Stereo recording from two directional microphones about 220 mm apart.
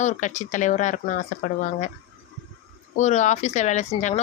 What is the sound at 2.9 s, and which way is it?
Speech, 30° left (ahead or behind).